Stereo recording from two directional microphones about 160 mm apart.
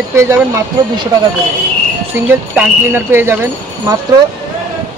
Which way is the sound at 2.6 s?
15° right (ahead or behind).